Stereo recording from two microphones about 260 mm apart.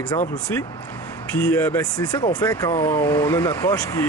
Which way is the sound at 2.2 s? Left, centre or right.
Centre.